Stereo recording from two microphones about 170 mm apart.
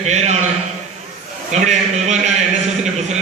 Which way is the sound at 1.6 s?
45° right (ahead or behind).